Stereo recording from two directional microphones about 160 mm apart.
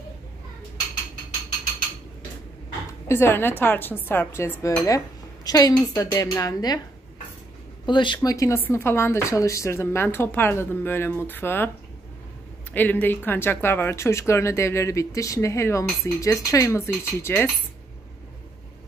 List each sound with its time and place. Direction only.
3.1 s speech: 15° left (ahead or behind)
7.8 s speech: 30° left (ahead or behind); by 11.7 s 15° left (ahead or behind)
12.7 s speech: 10° left (ahead or behind)